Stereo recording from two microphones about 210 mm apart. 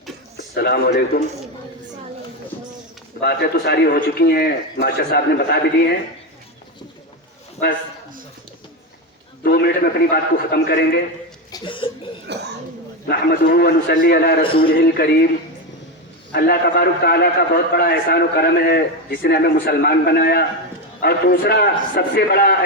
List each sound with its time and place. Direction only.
0.5 s a man's voice: 45° left (ahead or behind)
3.2 s a man's voice: 50° left (ahead or behind)
9.4 s a man's voice: 45° left (ahead or behind)
11.5 s cough: 25° left (ahead or behind)
12.3 s cough: 55° right (ahead or behind)
13.1 s a man's voice: 50° left (ahead or behind)
16.3 s a man's voice: 45° left (ahead or behind)